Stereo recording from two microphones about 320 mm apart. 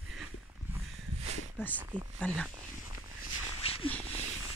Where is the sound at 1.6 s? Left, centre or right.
Centre.